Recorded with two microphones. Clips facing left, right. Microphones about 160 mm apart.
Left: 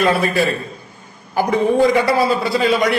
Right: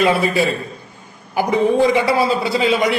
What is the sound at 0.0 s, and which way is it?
Speech, 15° right (ahead or behind).